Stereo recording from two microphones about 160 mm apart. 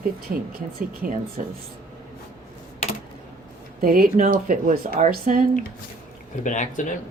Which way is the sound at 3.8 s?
65° right (ahead or behind).